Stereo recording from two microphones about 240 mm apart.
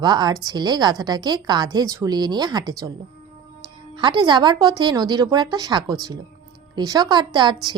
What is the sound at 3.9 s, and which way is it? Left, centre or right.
A woman's voice, centre.